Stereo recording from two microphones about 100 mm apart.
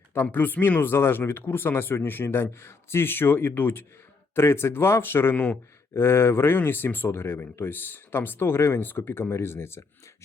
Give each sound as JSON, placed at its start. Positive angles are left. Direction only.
{"t": 0.1, "sound": "speech", "side_deg": 20}